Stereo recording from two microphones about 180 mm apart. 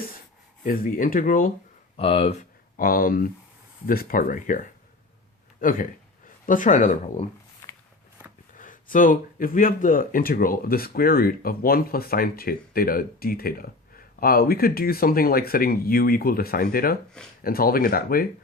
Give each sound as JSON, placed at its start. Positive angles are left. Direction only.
{"t": 0.6, "sound": "speech", "side_deg": 50}
{"t": 2.0, "sound": "speech", "side_deg": 30}
{"t": 2.7, "sound": "speech", "side_deg": 50}
{"t": 8.5, "sound": "speech", "side_deg": 50}